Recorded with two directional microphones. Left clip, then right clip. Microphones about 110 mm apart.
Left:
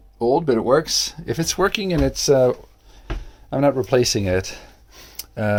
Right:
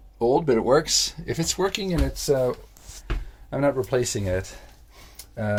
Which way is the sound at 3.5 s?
65° left (ahead or behind).